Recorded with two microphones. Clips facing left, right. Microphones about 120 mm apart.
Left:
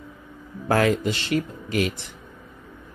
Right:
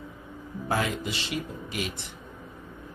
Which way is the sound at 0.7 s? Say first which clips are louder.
Left 8 dB; 70° left (ahead or behind).